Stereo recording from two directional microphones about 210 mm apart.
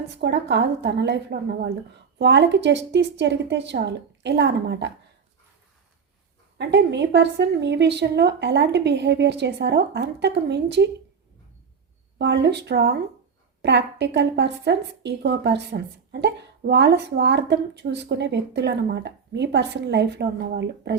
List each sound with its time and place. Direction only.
0.1 s a woman's voice: 55° right (ahead or behind)
6.6 s a woman's voice: 55° right (ahead or behind)
12.2 s a woman's voice: 50° right (ahead or behind)